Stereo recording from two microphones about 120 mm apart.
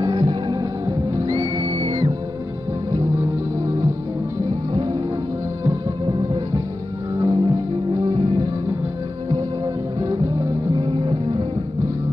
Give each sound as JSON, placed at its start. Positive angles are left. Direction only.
{"t": 0.0, "sound": "music", "side_deg": -35}
{"t": 1.7, "sound": "music", "side_deg": -50}
{"t": 3.2, "sound": "music", "side_deg": -30}
{"t": 7.2, "sound": "music", "side_deg": -35}
{"t": 9.9, "sound": "music", "side_deg": -30}
{"t": 10.8, "sound": "music", "side_deg": -45}